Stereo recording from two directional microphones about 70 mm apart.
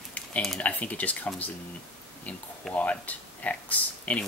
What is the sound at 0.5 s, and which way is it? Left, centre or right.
Speech, left.